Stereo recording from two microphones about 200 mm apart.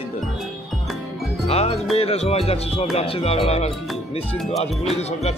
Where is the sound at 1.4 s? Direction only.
30° left (ahead or behind).